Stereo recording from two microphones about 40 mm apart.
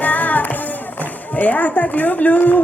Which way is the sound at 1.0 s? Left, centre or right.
Left.